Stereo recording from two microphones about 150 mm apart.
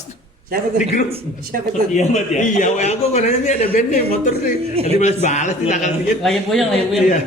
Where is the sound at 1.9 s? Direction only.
50° left (ahead or behind).